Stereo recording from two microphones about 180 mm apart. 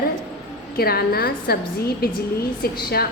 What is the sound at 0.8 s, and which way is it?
A woman's voice, 60° left (ahead or behind).